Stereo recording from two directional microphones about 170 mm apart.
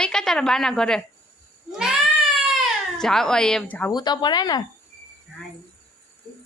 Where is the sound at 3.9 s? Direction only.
25° left (ahead or behind).